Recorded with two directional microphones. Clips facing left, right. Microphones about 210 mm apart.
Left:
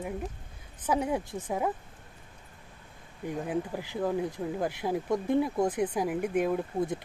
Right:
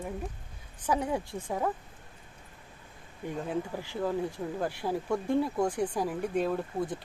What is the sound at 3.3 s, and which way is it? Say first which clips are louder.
Speech: left 1 dB; 10° left (ahead or behind).